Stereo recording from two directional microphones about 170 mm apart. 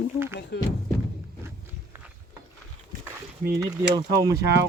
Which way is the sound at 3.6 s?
20° right (ahead or behind).